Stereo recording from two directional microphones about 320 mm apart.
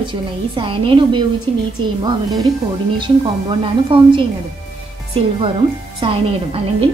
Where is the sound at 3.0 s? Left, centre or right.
Centre.